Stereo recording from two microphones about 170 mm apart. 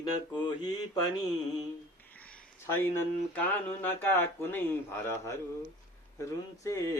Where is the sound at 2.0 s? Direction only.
10° left (ahead or behind).